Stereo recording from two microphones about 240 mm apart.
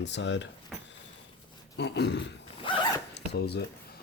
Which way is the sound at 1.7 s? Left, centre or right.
Left.